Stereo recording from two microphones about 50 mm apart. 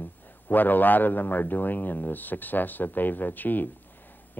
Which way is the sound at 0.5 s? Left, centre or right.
Left.